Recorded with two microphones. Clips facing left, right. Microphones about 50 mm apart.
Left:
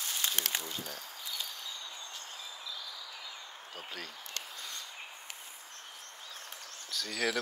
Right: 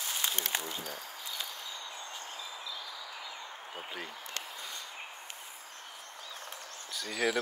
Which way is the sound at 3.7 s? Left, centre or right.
Right.